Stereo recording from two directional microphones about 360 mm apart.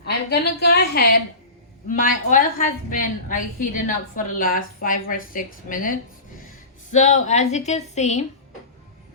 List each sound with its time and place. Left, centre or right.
0.0 s a woman's voice: left